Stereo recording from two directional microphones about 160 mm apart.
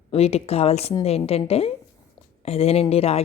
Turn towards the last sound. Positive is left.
turn(degrees=40)  # may be behind; listen again after turning